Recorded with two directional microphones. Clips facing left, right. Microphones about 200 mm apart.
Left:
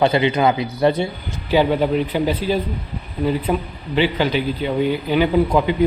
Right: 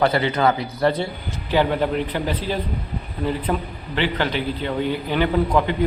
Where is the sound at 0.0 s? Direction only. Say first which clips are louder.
Left 3 dB; 20° left (ahead or behind).